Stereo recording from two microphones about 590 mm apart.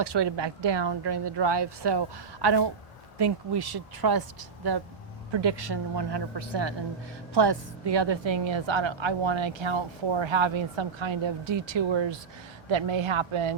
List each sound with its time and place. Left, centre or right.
0.0 s a woman's voice: right